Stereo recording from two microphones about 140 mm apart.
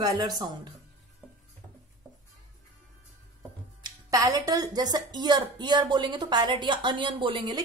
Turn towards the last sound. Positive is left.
turn(degrees=-35)  # may be behind; listen again after turning